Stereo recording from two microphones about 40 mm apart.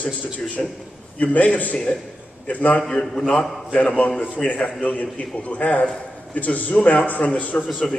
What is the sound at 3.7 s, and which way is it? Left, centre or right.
Speech, left.